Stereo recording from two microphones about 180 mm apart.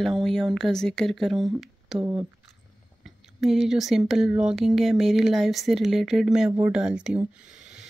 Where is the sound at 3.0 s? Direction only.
Centre (ahead or behind).